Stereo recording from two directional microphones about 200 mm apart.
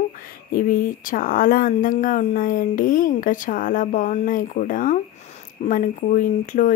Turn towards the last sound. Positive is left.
turn(degrees=40)  # may be behind; listen again after turning